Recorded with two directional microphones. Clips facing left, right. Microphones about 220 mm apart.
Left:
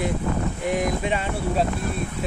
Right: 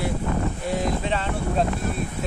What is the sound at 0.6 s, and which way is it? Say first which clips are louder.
Speech: left 2 dB; 15° left (ahead or behind).